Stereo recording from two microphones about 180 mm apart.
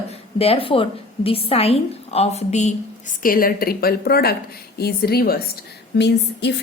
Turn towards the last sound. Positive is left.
turn(degrees=70)  # may be behind; listen again after turning